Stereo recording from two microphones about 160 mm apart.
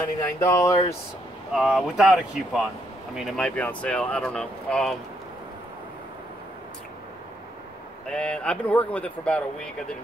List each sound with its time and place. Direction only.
0.4 s speech: 20° left (ahead or behind)
1.5 s speech: centre (ahead or behind)
8.1 s speech: 5° left (ahead or behind)